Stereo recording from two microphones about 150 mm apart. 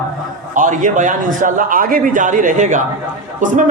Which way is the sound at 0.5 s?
60° right (ahead or behind).